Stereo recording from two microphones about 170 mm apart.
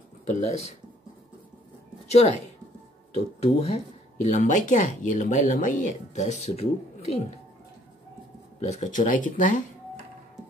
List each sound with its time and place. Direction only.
0.3 s speech: 40° left (ahead or behind)
2.0 s speech: 40° left (ahead or behind)
4.3 s speech: 50° left (ahead or behind)
8.5 s speech: 45° left (ahead or behind)